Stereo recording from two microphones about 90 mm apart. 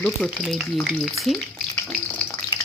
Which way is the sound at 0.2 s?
10° left (ahead or behind).